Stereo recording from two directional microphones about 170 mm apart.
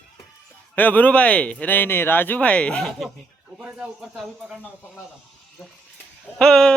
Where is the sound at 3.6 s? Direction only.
10° right (ahead or behind).